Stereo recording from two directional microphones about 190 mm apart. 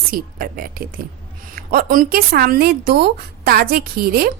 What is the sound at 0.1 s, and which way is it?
A woman's voice, 50° right (ahead or behind).